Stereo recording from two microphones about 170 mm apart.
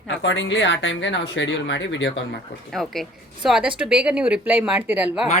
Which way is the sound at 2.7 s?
Centre (ahead or behind).